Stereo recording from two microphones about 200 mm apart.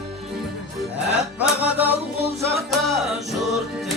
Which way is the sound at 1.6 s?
10° right (ahead or behind).